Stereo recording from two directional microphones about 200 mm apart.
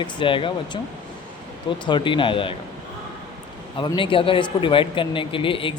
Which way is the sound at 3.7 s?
25° left (ahead or behind).